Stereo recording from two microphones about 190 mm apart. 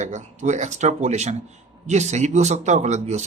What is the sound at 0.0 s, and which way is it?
Speech, 40° right (ahead or behind).